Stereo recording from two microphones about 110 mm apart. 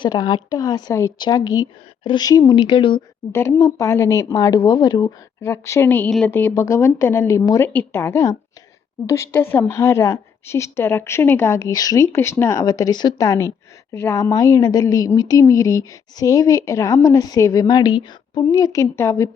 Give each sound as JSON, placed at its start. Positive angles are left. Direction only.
{"t": 0.0, "sound": "a woman's voice", "side_deg": 45}
{"t": 3.3, "sound": "a woman's voice", "side_deg": 25}
{"t": 5.4, "sound": "a woman's voice", "side_deg": 25}
{"t": 6.1, "sound": "speech", "side_deg": 5}
{"t": 6.6, "sound": "a woman's voice", "side_deg": 25}
{"t": 7.6, "sound": "a woman's voice", "side_deg": 20}
{"t": 12.1, "sound": "a woman's voice", "side_deg": 25}
{"t": 18.5, "sound": "a woman's voice", "side_deg": 30}